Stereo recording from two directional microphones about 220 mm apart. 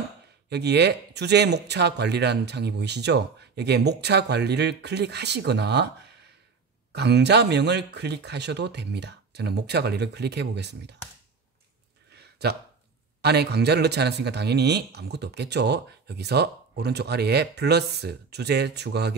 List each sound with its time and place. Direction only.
0.5 s speech: 50° right (ahead or behind)
12.1 s a sound: 45° right (ahead or behind)
13.2 s speech: 50° right (ahead or behind)